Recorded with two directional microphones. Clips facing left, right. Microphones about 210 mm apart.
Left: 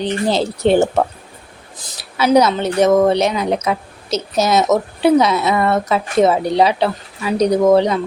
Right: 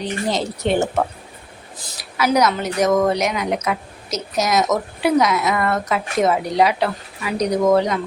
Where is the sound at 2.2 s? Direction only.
30° left (ahead or behind).